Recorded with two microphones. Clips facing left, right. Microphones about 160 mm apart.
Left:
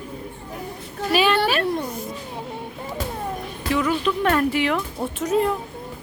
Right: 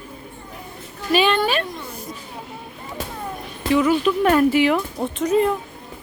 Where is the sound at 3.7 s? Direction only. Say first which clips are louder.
Right 4 dB; 5° right (ahead or behind).